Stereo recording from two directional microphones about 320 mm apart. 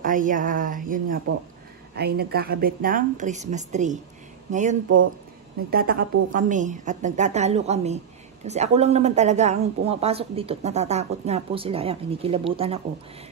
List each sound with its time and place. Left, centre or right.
0.0 s speech: right
4.8 s speech: right
5.7 s speech: right